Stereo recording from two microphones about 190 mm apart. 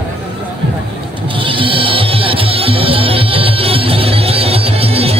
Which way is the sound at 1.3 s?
25° right (ahead or behind).